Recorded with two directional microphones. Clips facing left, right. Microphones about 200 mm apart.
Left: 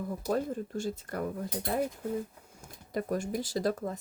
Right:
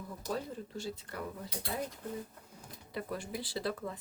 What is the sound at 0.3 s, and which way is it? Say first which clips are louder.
Speech: left 7 dB; 50° left (ahead or behind).